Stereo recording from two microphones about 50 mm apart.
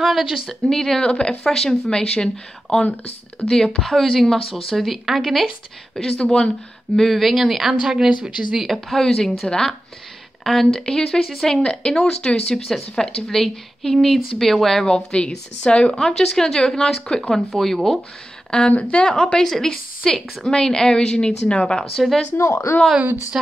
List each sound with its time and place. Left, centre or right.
0.0 s speech: centre
0.5 s speech: centre
3.9 s speech: centre
6.2 s speech: centre
7.0 s speech: centre
8.6 s speech: centre
17.5 s speech: centre
18.5 s speech: left
21.9 s speech: centre
22.4 s speech: left